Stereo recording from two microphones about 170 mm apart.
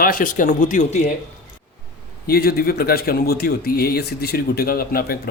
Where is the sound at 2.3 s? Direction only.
65° left (ahead or behind).